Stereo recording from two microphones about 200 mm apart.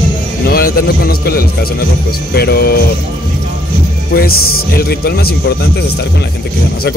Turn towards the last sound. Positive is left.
turn(degrees=50)  # may be behind; listen again after turning